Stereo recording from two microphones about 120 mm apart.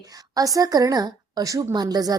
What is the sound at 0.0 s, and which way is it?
A woman's voice, 30° right (ahead or behind).